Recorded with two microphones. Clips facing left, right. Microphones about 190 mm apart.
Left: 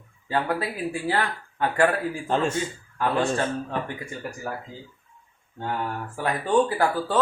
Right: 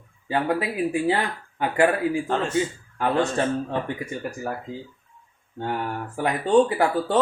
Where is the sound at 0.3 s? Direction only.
15° right (ahead or behind).